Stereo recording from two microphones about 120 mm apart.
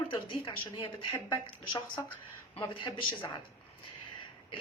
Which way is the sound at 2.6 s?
45° left (ahead or behind).